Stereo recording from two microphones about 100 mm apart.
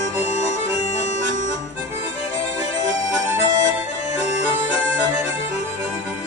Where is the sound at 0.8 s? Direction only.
90° left.